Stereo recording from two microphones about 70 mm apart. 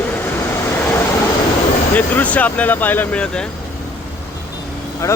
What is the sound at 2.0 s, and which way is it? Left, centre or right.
Speech, left.